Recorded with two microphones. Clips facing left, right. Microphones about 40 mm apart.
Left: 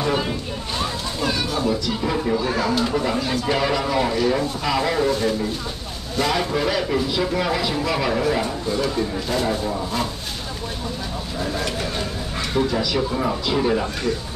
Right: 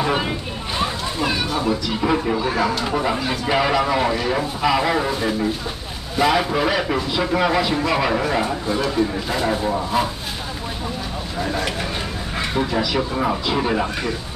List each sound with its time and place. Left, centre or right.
0.0 s speech: centre
8.8 s speech: centre
9.5 s speech: centre
11.3 s speech: centre